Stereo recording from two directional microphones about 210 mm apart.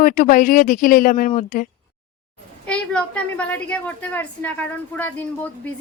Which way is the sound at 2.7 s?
5° left (ahead or behind).